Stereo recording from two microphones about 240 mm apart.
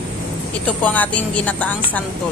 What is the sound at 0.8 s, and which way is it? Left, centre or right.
Speech, centre.